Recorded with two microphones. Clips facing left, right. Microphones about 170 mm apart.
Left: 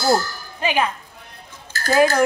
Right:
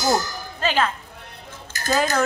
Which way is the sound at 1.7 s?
15° right (ahead or behind).